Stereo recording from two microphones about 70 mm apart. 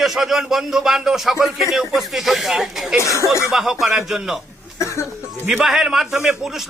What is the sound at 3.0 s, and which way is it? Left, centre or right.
Speech, left.